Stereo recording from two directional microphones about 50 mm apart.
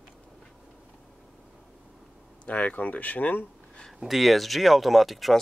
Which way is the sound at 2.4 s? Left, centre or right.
Left.